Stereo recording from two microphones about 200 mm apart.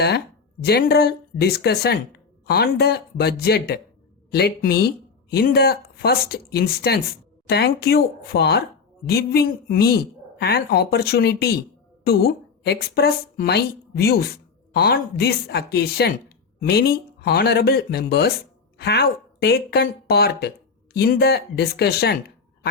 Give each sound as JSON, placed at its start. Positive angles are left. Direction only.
{"t": 0.6, "sound": "a woman's voice", "side_deg": 55}